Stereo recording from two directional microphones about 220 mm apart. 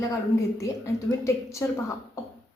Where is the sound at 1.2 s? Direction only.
15° left (ahead or behind).